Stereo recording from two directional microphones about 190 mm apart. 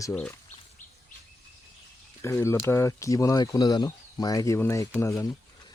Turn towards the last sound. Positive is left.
turn(degrees=15)  # may be behind; listen again after turning